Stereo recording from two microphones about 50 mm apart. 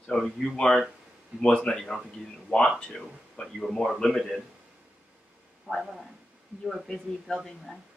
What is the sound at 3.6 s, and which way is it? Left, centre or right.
Speech, centre.